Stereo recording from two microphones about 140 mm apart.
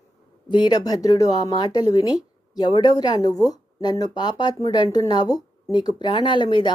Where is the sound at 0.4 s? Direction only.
30° left (ahead or behind).